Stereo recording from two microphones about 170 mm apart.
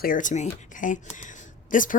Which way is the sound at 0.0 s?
50° left (ahead or behind).